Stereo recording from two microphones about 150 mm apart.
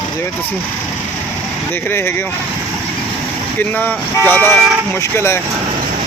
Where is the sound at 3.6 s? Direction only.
10° left (ahead or behind).